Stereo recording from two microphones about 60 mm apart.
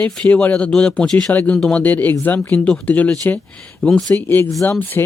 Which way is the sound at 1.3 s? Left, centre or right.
Left.